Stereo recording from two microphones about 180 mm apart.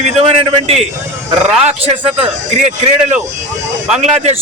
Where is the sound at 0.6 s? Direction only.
35° right (ahead or behind).